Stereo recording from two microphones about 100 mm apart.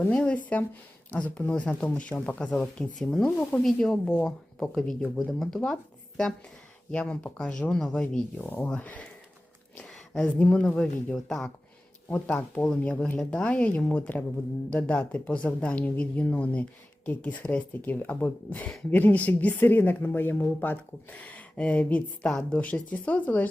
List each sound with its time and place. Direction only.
0.0 s speech: 15° left (ahead or behind)
6.9 s speech: 10° left (ahead or behind)
8.4 s speech: 20° left (ahead or behind)
12.0 s speech: 15° left (ahead or behind)